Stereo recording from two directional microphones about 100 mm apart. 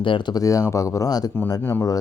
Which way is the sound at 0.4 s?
35° left (ahead or behind).